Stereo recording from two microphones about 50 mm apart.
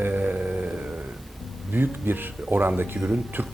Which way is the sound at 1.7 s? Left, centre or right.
Right.